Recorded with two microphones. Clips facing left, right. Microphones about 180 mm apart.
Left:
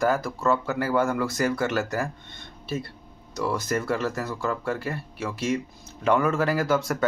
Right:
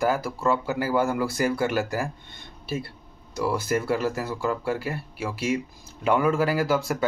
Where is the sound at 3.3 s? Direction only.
10° right (ahead or behind).